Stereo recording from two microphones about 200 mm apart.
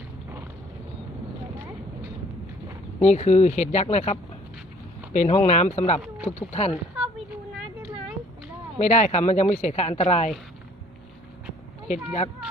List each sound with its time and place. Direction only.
3.0 s speech: 35° left (ahead or behind)
8.8 s speech: 35° left (ahead or behind)
11.9 s speech: 35° left (ahead or behind)